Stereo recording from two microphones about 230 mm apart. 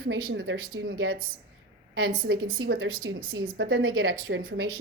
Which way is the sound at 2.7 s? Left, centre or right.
Right.